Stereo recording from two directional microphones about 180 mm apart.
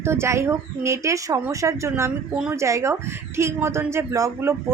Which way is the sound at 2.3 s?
5° right (ahead or behind).